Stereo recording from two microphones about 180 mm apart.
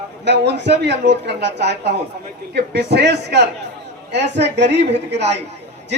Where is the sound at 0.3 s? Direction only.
70° right (ahead or behind).